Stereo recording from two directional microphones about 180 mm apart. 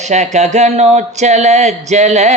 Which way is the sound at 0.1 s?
40° right (ahead or behind).